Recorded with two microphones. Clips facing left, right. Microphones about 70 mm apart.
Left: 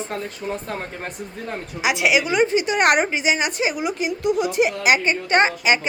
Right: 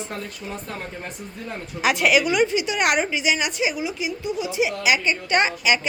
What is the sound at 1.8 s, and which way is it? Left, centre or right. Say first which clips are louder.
Speech: even; centre.